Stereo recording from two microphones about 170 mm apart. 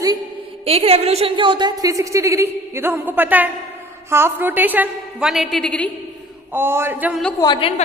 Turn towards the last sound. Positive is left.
turn(degrees=25)  # may be behind; listen again after turning